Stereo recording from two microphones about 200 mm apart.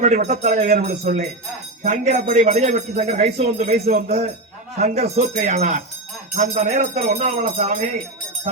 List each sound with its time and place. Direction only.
0.0 s speech: 35° right (ahead or behind)
1.0 s speech: 50° right (ahead or behind)
1.8 s speech: 35° right (ahead or behind)